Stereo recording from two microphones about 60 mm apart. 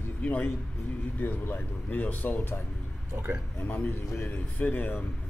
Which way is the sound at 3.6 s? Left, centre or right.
Left.